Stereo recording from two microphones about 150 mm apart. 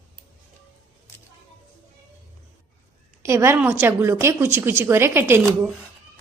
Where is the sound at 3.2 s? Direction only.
15° right (ahead or behind).